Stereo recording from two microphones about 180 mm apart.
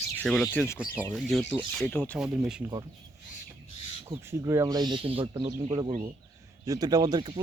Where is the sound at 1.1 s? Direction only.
Centre (ahead or behind).